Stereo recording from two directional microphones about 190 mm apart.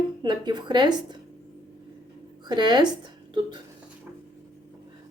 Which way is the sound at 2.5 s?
25° right (ahead or behind).